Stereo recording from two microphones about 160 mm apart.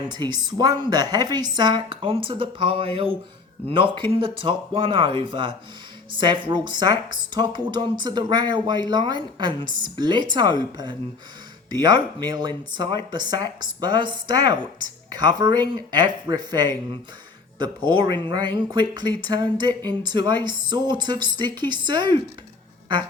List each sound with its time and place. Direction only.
0.1 s a woman's voice: 25° right (ahead or behind)